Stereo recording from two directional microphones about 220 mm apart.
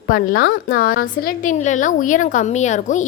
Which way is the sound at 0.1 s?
40° left (ahead or behind).